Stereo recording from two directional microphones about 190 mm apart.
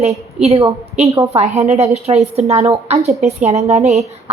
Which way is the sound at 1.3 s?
35° right (ahead or behind).